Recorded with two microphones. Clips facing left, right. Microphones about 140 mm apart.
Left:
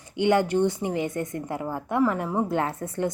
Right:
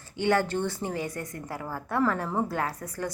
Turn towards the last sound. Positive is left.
turn(degrees=25)  # may be behind; listen again after turning